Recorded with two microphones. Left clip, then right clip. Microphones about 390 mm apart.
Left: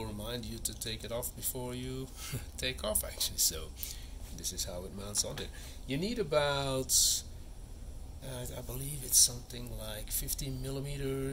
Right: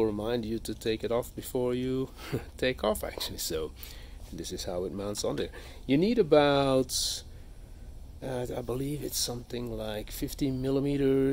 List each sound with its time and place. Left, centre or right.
0.0 s speech: centre